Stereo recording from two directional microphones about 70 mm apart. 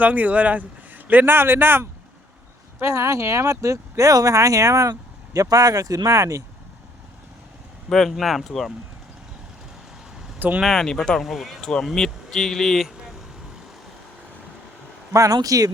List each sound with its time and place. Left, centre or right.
0.0 s a man's voice: right
2.8 s speech: right
7.9 s speech: centre
10.6 s speech: centre
11.3 s speech: centre
15.1 s speech: right